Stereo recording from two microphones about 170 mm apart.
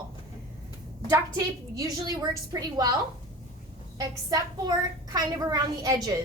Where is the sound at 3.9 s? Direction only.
20° right (ahead or behind).